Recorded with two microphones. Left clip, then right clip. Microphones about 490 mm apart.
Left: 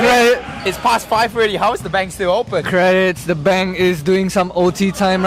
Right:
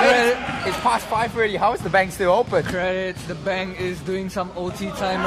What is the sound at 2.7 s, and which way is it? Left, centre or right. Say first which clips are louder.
Speech: left 10 dB; left.